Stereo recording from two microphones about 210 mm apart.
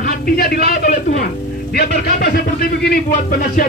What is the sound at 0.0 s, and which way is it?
A man's voice, 50° left (ahead or behind).